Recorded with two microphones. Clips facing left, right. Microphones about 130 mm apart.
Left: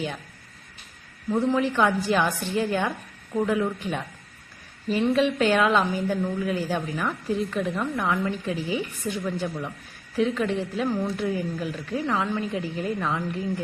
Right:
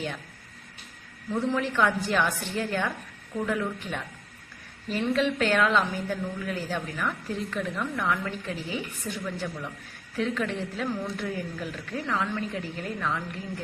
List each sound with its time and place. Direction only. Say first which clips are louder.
1.3 s a woman's voice: left 4 dB; 15° left (ahead or behind)
9.2 s a woman's voice: left 4 dB; 25° left (ahead or behind)